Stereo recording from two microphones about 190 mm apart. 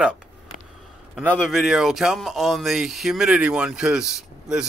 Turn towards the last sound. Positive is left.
turn(degrees=-5)  # may be behind; listen again after turning